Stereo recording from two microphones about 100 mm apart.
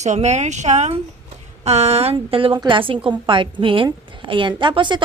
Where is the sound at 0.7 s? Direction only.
90° right.